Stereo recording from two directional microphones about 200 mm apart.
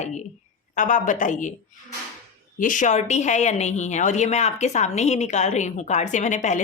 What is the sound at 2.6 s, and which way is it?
A woman's voice, 40° left (ahead or behind).